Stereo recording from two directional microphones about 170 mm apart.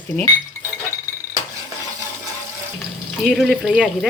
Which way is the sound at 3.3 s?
Centre (ahead or behind).